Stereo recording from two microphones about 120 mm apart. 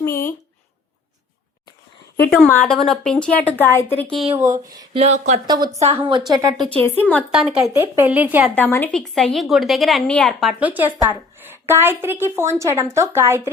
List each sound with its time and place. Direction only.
0.0 s a sound: 20° left (ahead or behind)
2.5 s speech: 15° left (ahead or behind)
4.9 s speech: 70° right (ahead or behind)
5.5 s a woman's voice: 35° right (ahead or behind)
6.6 s speech: 10° left (ahead or behind)
7.3 s a woman's voice: 5° right (ahead or behind)
7.6 s speech: 20° right (ahead or behind)
8.5 s speech: 15° left (ahead or behind)
8.9 s a woman's voice: 5° left (ahead or behind)
10.6 s a woman's voice: 15° right (ahead or behind)